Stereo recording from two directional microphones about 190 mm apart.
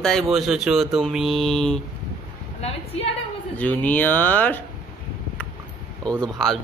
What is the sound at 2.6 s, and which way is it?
Speech, 30° left (ahead or behind).